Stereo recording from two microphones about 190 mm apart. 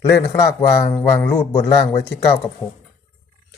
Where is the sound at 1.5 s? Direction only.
30° left (ahead or behind).